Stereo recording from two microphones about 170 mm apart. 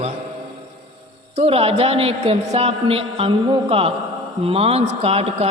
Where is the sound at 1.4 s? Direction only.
35° right (ahead or behind).